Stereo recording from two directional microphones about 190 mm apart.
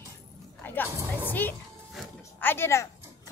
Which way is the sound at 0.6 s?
10° left (ahead or behind).